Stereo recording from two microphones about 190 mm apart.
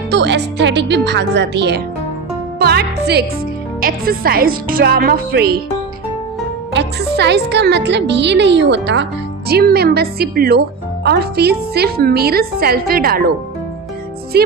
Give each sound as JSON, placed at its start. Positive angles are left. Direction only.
{"t": 0.1, "sound": "a woman's voice", "side_deg": -65}
{"t": 6.7, "sound": "a woman's voice", "side_deg": -65}
{"t": 9.5, "sound": "a woman's voice", "side_deg": -55}
{"t": 14.3, "sound": "music", "side_deg": -55}